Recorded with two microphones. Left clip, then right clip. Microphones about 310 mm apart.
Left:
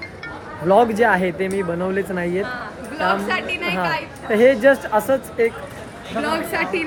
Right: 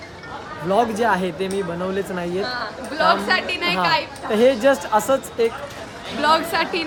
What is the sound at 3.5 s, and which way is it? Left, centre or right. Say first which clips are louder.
Speech: right 1 dB; right.